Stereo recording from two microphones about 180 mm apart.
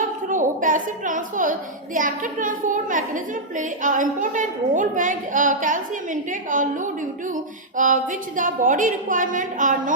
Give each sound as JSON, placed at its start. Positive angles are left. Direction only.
{"t": 0.3, "sound": "a woman's voice", "side_deg": -45}